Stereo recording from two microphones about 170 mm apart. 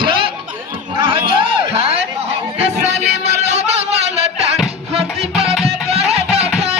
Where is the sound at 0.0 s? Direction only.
30° right (ahead or behind).